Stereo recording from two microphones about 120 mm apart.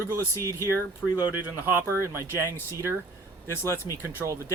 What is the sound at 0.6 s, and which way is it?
Speech, 20° right (ahead or behind).